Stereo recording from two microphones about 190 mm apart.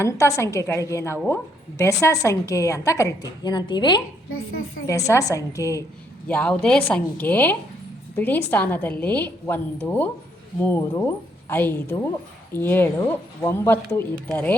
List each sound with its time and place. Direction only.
0.0 s a woman's voice: 15° left (ahead or behind)
4.3 s a woman's voice: 90° left
4.9 s a woman's voice: 15° left (ahead or behind)